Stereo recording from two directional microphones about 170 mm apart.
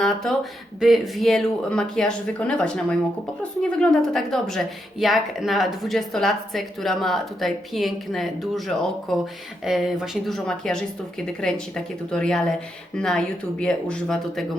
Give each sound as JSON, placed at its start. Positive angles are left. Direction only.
{"t": 0.0, "sound": "a woman's voice", "side_deg": 0}